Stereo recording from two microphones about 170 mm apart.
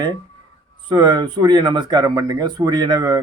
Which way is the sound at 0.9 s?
25° right (ahead or behind).